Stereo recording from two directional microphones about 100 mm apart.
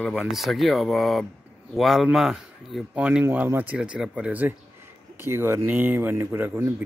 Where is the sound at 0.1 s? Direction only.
Centre (ahead or behind).